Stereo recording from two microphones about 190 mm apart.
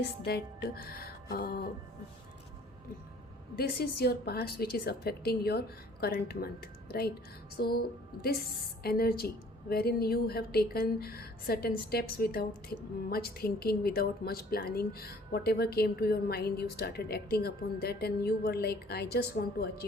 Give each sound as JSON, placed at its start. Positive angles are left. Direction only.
{"t": 0.3, "sound": "music", "side_deg": 55}
{"t": 3.6, "sound": "a woman's voice", "side_deg": 55}
{"t": 7.5, "sound": "music", "side_deg": 55}
{"t": 8.8, "sound": "a woman's voice", "side_deg": 55}